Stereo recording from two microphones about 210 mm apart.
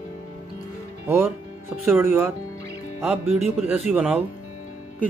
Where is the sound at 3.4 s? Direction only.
5° right (ahead or behind).